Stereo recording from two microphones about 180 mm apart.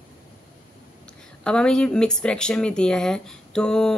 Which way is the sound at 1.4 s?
5° left (ahead or behind).